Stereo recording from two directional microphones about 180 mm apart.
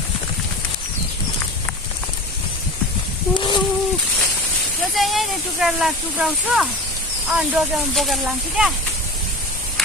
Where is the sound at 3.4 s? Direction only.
25° left (ahead or behind).